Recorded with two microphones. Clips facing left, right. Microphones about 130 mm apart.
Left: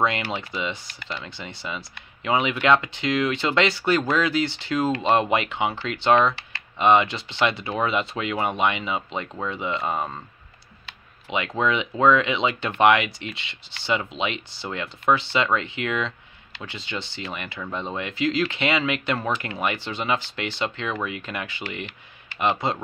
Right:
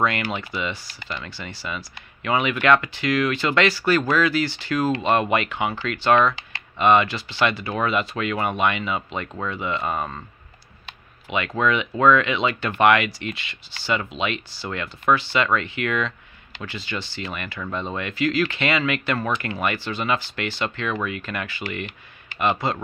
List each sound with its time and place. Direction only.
0.0 s speech: 25° left (ahead or behind)
11.3 s speech: 20° left (ahead or behind)